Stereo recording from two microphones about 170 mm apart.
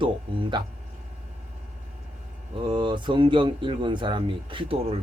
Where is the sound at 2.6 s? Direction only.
25° right (ahead or behind).